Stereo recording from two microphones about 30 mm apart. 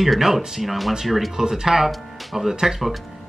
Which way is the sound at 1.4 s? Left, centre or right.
Centre.